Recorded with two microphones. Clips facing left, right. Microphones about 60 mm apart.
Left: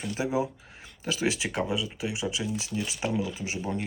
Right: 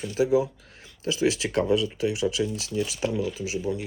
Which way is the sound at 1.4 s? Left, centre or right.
Centre.